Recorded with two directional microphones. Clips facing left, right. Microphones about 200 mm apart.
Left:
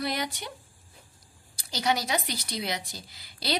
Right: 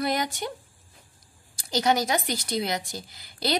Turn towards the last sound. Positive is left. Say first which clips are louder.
# right 5 dB
turn(degrees=-50)  # may be behind; listen again after turning